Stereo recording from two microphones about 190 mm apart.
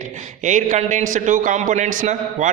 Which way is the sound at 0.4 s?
40° right (ahead or behind).